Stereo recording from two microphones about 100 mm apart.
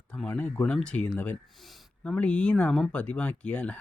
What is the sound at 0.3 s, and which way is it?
Speech, 15° left (ahead or behind).